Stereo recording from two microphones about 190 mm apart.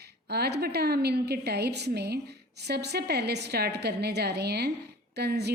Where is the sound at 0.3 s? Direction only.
60° right (ahead or behind).